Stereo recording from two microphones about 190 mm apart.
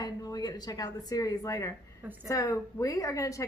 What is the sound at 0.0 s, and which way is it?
A woman's voice, 20° left (ahead or behind).